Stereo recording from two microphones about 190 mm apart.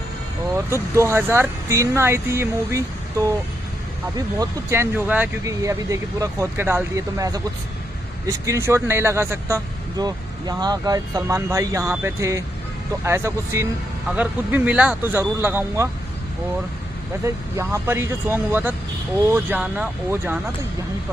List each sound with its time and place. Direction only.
0.6 s speech: 15° right (ahead or behind)
4.4 s speech: 15° right (ahead or behind)
17.2 s speech: 15° right (ahead or behind)